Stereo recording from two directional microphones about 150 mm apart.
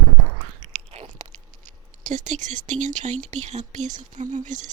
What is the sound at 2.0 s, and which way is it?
Speech, 55° right (ahead or behind).